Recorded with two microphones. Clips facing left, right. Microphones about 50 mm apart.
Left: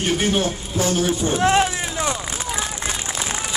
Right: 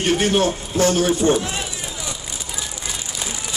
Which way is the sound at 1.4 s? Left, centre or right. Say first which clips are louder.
Left 10 dB; left.